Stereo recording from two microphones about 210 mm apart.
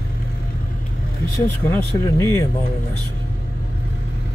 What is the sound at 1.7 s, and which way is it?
Speech, 10° left (ahead or behind).